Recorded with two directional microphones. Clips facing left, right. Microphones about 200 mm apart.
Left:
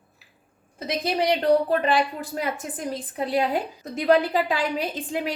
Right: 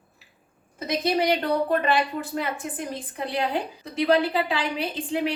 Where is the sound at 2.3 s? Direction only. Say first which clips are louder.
Even; 40° left (ahead or behind).